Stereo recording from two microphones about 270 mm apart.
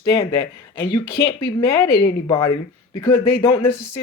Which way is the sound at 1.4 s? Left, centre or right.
Left.